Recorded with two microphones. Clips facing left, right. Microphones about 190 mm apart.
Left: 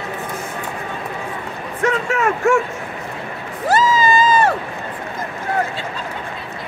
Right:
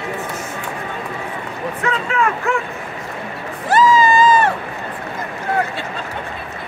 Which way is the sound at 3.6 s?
40° left (ahead or behind).